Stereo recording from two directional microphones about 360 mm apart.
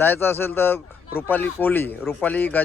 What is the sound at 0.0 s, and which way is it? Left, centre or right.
Speech, centre.